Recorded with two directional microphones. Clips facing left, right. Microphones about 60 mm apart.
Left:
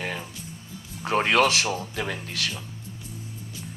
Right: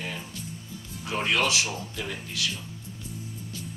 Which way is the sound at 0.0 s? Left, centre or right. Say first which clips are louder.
Left 4 dB; left.